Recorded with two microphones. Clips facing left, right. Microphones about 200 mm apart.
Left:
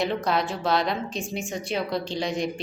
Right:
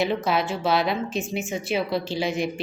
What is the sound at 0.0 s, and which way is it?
Speech, 5° right (ahead or behind).